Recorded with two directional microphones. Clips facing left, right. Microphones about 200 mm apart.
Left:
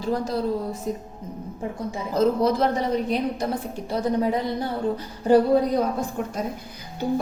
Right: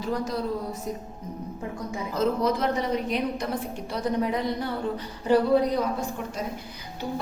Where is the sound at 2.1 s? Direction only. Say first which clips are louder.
Left 4 dB; 35° left (ahead or behind).